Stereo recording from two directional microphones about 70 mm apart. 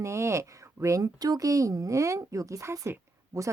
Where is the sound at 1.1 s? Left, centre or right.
Right.